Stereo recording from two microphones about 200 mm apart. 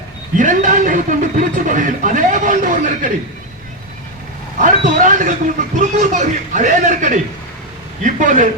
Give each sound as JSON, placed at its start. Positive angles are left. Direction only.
{"t": 0.3, "sound": "speech", "side_deg": -40}
{"t": 4.6, "sound": "speech", "side_deg": -40}